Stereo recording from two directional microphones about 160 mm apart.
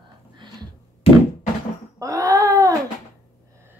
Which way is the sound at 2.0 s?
20° right (ahead or behind).